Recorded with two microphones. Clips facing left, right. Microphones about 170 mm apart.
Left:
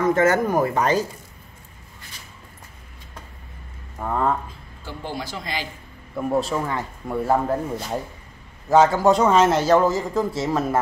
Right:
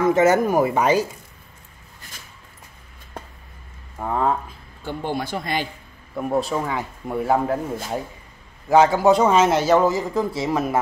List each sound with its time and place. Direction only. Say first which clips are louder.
0.1 s speech: right 2 dB; 15° right (ahead or behind)
4.0 s speech: right 1 dB; 10° right (ahead or behind)
4.8 s speech: right 5 dB; 55° right (ahead or behind)
6.1 s speech: even; centre (ahead or behind)
8.7 s speech: right 1 dB; 15° right (ahead or behind)